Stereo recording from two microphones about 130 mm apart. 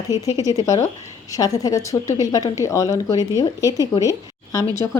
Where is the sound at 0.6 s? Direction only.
25° left (ahead or behind).